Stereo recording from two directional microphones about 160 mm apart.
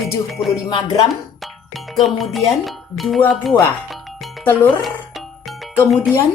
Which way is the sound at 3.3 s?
Centre (ahead or behind).